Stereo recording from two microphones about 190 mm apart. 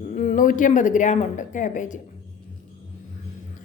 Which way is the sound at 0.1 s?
40° left (ahead or behind).